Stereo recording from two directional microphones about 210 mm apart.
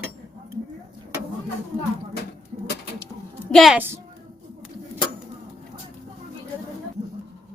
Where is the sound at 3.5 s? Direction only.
Centre (ahead or behind).